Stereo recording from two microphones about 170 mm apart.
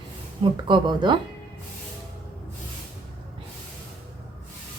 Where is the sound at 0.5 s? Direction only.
25° right (ahead or behind).